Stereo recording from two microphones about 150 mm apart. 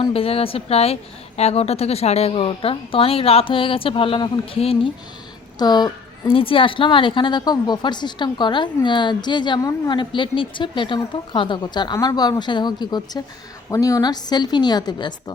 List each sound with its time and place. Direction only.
0.0 s a woman's voice: 40° left (ahead or behind)
5.5 s a woman's voice: 30° left (ahead or behind)